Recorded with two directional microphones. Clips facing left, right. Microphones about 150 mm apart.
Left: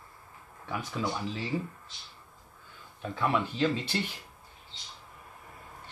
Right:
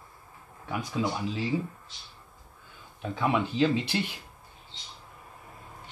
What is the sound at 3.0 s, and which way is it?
Speech, 15° right (ahead or behind).